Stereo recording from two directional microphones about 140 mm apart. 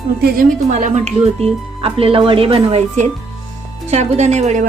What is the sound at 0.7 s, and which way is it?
Speech, 60° right (ahead or behind).